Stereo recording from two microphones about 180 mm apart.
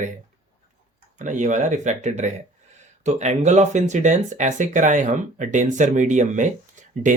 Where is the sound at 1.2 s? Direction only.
45° right (ahead or behind).